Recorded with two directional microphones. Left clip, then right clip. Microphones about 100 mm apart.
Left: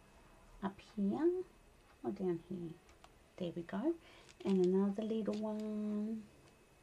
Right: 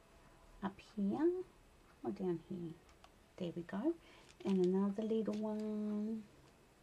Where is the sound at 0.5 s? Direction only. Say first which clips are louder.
Left 1 dB; 10° right (ahead or behind).